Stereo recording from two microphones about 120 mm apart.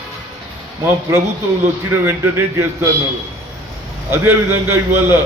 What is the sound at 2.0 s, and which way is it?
Speech, 20° right (ahead or behind).